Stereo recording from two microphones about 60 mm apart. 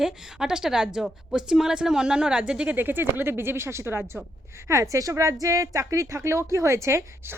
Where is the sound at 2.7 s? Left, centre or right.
Right.